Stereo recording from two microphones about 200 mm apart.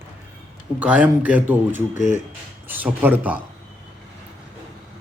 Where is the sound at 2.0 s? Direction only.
35° left (ahead or behind).